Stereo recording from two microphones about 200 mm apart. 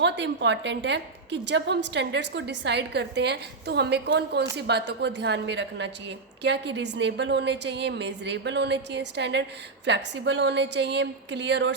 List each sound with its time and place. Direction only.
0.0 s a woman's voice: 60° right (ahead or behind)